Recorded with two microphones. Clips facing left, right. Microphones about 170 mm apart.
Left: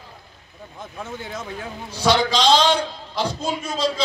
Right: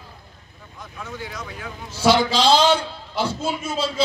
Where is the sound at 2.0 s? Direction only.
5° right (ahead or behind).